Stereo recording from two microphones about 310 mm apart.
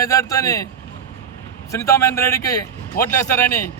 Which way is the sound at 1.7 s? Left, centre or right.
Centre.